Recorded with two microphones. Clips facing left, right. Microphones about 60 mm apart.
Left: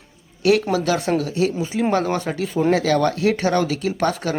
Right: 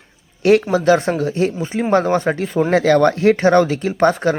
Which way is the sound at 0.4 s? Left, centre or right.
Right.